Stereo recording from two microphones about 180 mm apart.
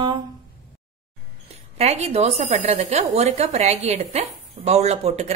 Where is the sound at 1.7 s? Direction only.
35° right (ahead or behind).